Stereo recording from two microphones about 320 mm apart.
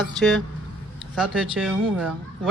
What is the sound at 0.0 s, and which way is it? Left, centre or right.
A woman's voice, centre.